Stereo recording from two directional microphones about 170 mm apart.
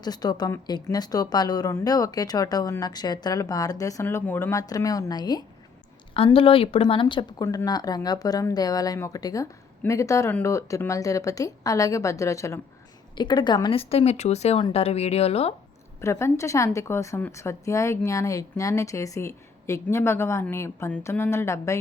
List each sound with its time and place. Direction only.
0.0 s speech: 25° left (ahead or behind)
16.0 s a woman's voice: 15° left (ahead or behind)